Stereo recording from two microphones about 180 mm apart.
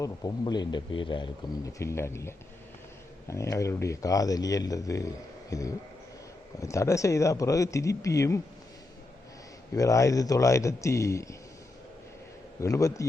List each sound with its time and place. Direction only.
0.0 s speech: 25° left (ahead or behind)
9.7 s speech: 20° left (ahead or behind)
12.5 s speech: 15° left (ahead or behind)